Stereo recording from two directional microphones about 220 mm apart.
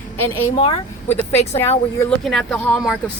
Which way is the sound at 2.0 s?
5° left (ahead or behind).